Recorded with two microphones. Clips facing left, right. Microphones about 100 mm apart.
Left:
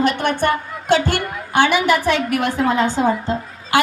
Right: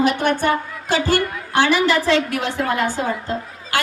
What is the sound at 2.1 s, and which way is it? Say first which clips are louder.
Speech: right 1 dB; 90° right.